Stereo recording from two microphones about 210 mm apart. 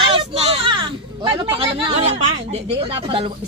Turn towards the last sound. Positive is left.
turn(degrees=-25)  # may be behind; listen again after turning